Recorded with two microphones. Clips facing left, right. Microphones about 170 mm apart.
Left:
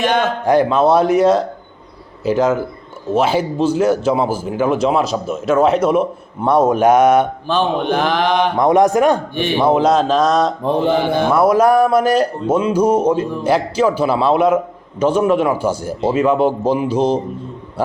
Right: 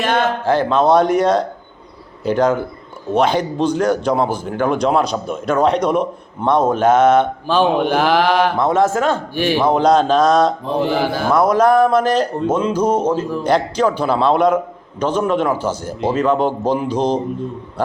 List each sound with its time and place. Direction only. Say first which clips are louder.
0.4 s speech: left 3 dB; 10° left (ahead or behind)
7.4 s speech: right 2 dB; 10° right (ahead or behind)
8.5 s speech: left 3 dB; 15° left (ahead or behind)
9.3 s speech: right 1 dB; 5° right (ahead or behind)
9.6 s speech: left 1 dB; 5° left (ahead or behind)
11.3 s speech: even; 10° left (ahead or behind)